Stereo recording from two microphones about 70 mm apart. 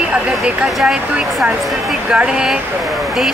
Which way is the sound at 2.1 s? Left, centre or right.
Centre.